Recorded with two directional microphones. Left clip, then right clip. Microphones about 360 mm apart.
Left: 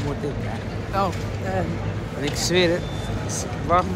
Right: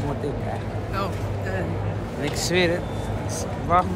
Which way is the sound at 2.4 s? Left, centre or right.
Centre.